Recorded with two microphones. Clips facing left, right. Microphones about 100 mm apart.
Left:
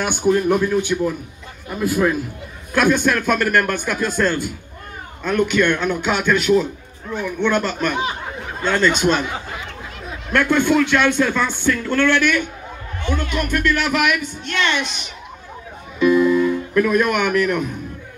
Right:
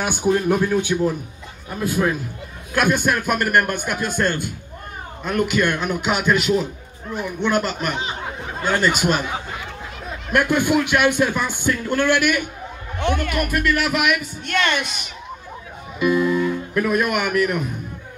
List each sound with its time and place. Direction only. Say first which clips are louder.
0.0 s speech: left 2 dB; 10° right (ahead or behind)
1.7 s a man's voice: left 3 dB; centre (ahead or behind)
5.2 s a man's voice: left 3 dB; 5° right (ahead or behind)
10.3 s speech: left 2 dB; 10° right (ahead or behind)
13.0 s speech: right 2 dB; 60° right (ahead or behind)
13.4 s a man's voice: left 3 dB; 5° right (ahead or behind)
14.4 s speech: right 1 dB; 50° right (ahead or behind)
14.8 s a man's voice: left 2 dB; 5° right (ahead or behind)
16.0 s music: left 4 dB; 5° right (ahead or behind)